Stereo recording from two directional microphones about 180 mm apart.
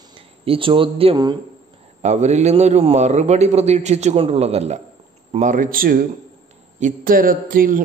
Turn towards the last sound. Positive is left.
turn(degrees=-50)  # may be behind; listen again after turning